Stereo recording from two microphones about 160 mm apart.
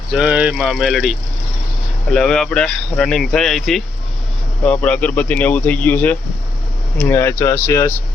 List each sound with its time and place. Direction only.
0.1 s speech: 5° right (ahead or behind); by 7.9 s 20° left (ahead or behind)